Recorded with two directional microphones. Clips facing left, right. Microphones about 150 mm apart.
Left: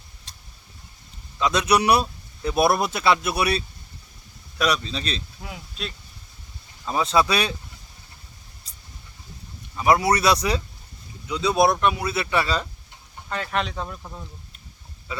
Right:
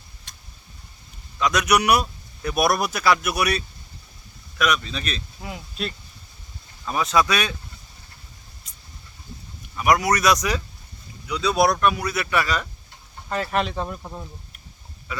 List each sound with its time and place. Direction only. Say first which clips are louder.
0.3 s vehicle: even; 30° left (ahead or behind)
1.4 s a man's voice: even; 25° left (ahead or behind)
5.4 s speech: right 4 dB; centre (ahead or behind)
6.8 s a man's voice: even; 25° left (ahead or behind)
8.7 s a sound: even; 35° left (ahead or behind)
9.7 s a man's voice: left 1 dB; 25° left (ahead or behind)
13.3 s speech: right 3 dB; 5° right (ahead or behind)
15.1 s speech: even; 25° left (ahead or behind)